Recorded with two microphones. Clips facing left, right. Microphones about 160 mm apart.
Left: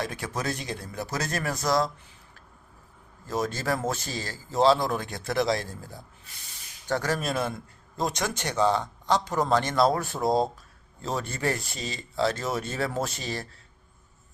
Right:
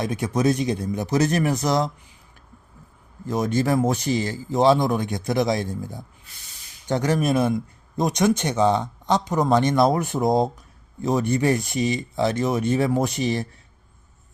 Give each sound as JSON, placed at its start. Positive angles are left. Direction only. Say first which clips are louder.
{"t": 0.0, "sound": "speech", "louder": "right 9 dB", "side_deg": -20}
{"t": 3.2, "sound": "speech", "louder": "right 6 dB", "side_deg": -20}